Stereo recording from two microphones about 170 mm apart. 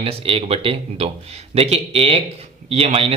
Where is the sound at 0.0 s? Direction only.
35° right (ahead or behind).